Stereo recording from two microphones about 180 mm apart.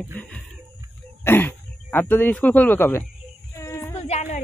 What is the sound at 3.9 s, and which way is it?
Music, 40° left (ahead or behind).